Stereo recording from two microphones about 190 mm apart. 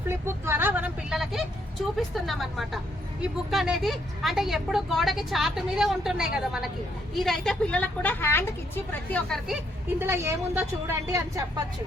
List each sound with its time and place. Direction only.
0.3 s vehicle: 10° right (ahead or behind)
2.0 s a woman's voice: centre (ahead or behind)
10.0 s a woman's voice: 15° right (ahead or behind)